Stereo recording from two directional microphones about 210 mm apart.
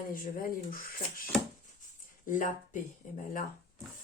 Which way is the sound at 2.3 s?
40° left (ahead or behind).